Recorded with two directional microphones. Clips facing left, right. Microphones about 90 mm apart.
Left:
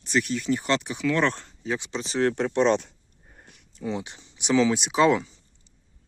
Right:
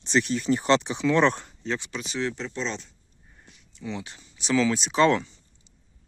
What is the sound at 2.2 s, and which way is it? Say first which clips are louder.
Speech: left 9 dB; 55° left (ahead or behind).